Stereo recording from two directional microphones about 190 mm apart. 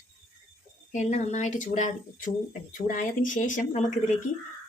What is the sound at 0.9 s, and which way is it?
Speech, 40° left (ahead or behind).